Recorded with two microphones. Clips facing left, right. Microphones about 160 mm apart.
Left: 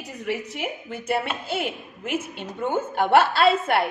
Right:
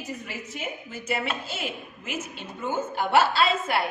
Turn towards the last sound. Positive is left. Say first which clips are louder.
# left 5 dB
turn(degrees=60)  # may be behind; listen again after turning